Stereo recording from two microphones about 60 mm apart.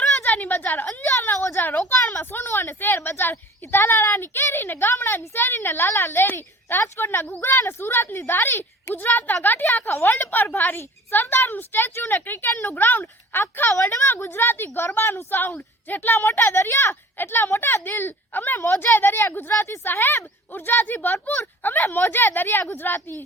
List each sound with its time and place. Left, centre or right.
0.2 s a woman's voice: left
14.3 s a woman's voice: left